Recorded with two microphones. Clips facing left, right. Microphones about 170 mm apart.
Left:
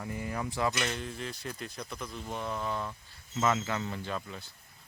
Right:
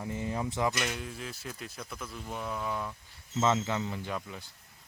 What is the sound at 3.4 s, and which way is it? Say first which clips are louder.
A man's voice: right 1 dB; 25° right (ahead or behind).